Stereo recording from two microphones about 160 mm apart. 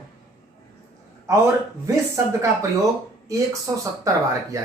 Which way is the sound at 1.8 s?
20° right (ahead or behind).